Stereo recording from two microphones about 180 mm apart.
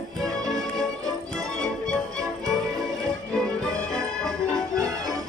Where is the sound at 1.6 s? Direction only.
5° left (ahead or behind).